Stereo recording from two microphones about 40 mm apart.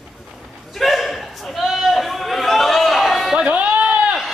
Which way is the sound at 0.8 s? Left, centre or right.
Centre.